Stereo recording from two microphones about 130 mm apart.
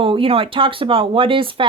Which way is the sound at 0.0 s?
45° right (ahead or behind).